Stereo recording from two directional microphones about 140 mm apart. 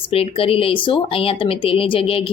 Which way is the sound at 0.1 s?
40° left (ahead or behind).